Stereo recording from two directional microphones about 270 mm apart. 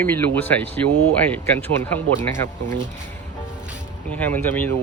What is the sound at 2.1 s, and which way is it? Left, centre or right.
Speech, right.